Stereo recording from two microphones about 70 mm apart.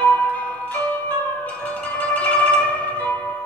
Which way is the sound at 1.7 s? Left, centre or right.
Left.